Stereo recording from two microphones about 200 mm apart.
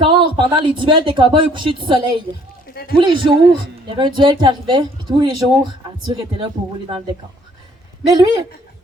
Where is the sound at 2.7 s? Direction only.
50° left (ahead or behind).